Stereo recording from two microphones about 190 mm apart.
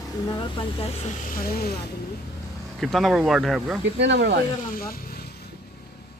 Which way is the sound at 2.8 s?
Centre (ahead or behind).